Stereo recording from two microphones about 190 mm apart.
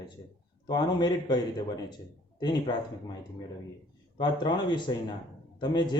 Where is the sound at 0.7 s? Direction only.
20° left (ahead or behind).